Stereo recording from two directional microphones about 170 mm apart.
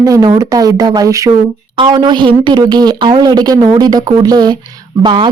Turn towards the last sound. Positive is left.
turn(degrees=-30)  # may be behind; listen again after turning